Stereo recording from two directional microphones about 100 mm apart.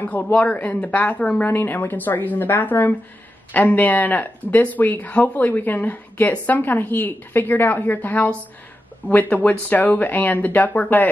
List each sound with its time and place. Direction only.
0.0 s speech: 15° left (ahead or behind)